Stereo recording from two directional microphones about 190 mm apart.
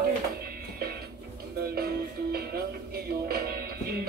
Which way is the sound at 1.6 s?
55° right (ahead or behind).